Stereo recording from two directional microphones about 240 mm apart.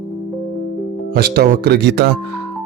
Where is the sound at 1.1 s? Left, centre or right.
Right.